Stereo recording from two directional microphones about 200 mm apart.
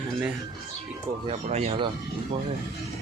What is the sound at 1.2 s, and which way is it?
Speech, 35° right (ahead or behind).